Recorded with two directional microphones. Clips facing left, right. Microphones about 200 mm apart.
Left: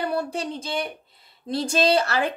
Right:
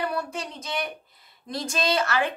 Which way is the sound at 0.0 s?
30° left (ahead or behind).